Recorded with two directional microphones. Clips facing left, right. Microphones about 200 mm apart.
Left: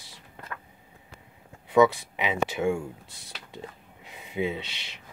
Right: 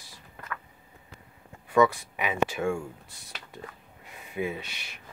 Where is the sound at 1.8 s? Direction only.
20° left (ahead or behind).